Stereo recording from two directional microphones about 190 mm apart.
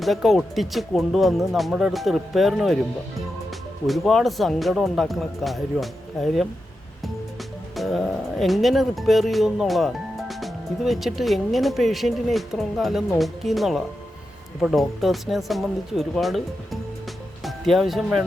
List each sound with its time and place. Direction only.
0.0 s speech: centre (ahead or behind)
3.8 s speech: centre (ahead or behind)
7.8 s speech: centre (ahead or behind)
17.4 s speech: centre (ahead or behind)